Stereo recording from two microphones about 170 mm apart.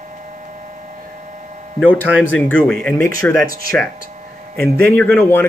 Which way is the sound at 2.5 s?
5° left (ahead or behind).